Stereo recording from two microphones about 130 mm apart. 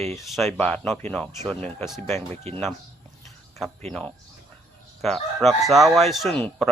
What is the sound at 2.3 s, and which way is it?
Speech, 55° right (ahead or behind).